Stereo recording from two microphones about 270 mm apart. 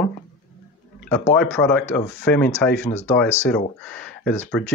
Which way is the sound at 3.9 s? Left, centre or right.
Centre.